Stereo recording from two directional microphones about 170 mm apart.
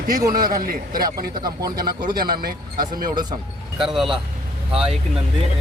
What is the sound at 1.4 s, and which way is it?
Speech, 25° right (ahead or behind).